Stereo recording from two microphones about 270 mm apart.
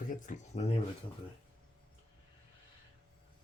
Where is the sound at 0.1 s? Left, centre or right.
Left.